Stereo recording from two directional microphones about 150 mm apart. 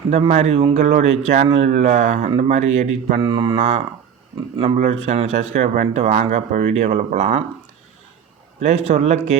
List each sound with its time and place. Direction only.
0.2 s speech: 45° right (ahead or behind)
3.2 s speech: 35° right (ahead or behind)
4.8 s speech: 50° right (ahead or behind)
8.6 s speech: 50° right (ahead or behind)